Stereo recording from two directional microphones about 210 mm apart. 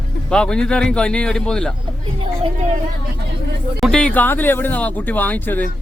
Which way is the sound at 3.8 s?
5° left (ahead or behind).